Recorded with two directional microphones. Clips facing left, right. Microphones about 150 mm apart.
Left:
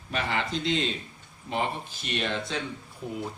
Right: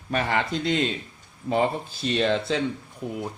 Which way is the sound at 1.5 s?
35° right (ahead or behind).